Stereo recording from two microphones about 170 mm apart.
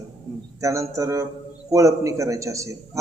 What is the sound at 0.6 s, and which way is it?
A man's voice, 20° right (ahead or behind).